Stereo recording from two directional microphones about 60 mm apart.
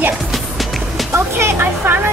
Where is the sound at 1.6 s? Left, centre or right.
Right.